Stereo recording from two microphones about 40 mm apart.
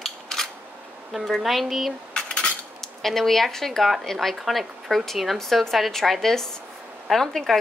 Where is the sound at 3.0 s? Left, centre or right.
Centre.